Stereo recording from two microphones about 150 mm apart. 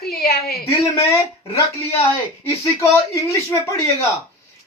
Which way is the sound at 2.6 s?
20° left (ahead or behind).